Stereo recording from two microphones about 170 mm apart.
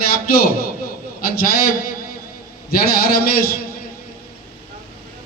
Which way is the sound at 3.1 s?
60° left (ahead or behind).